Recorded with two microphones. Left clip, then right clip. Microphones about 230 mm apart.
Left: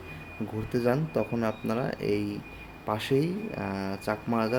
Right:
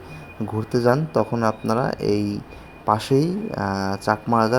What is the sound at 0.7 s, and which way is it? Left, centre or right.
Speech, centre.